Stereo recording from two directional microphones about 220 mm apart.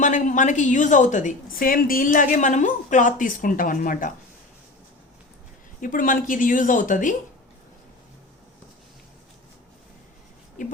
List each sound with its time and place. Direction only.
0.0 s a woman's voice: 35° left (ahead or behind)
5.8 s a woman's voice: 40° left (ahead or behind)